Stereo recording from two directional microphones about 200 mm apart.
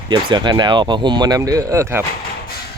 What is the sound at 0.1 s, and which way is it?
Speech, 20° right (ahead or behind).